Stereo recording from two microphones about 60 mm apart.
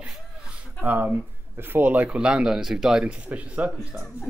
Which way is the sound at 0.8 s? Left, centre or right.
Right.